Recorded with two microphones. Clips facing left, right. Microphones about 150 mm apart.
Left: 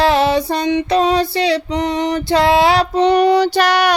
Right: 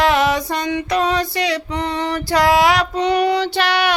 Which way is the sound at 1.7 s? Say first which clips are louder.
Left 4 dB; 20° left (ahead or behind).